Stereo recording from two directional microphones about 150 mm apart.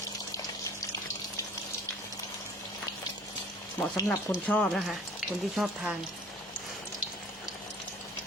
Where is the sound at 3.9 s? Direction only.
20° left (ahead or behind).